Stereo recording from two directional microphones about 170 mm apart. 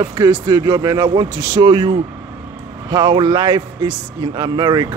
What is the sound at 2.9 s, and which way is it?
Speech, 25° right (ahead or behind).